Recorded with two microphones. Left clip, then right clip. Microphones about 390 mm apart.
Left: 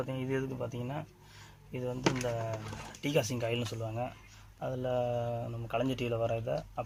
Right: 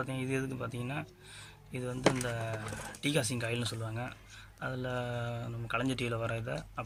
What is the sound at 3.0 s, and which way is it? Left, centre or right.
Speech, centre.